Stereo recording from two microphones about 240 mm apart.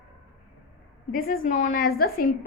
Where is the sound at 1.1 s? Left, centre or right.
Left.